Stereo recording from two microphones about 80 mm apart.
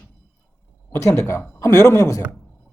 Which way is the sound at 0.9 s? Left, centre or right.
Left.